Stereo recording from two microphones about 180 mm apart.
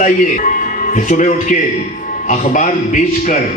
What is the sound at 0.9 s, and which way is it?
Speech, 45° left (ahead or behind).